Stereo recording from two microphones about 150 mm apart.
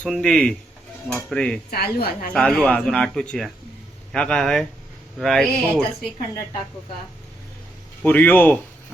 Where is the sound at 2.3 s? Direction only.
5° left (ahead or behind).